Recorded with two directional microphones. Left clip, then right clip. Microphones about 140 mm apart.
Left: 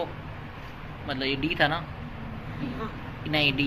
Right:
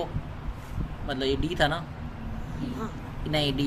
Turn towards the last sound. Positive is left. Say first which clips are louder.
# left 3 dB
turn(degrees=-55)  # may be behind; listen again after turning